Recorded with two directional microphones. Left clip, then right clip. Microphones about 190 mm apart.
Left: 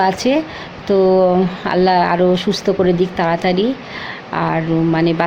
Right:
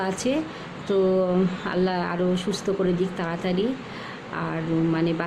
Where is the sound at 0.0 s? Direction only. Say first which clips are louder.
Left 11 dB; 15° left (ahead or behind).